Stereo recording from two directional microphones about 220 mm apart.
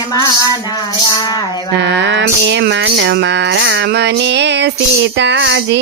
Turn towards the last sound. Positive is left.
turn(degrees=-50)  # may be behind; listen again after turning